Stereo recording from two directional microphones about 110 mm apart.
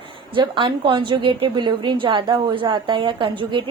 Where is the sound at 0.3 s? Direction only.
50° right (ahead or behind).